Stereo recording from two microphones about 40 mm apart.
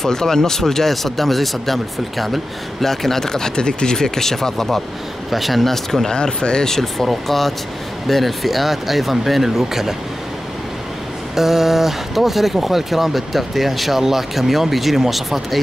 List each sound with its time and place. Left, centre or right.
0.0 s speech: centre
6.1 s speech: left; by 9.9 s centre
11.3 s speech: centre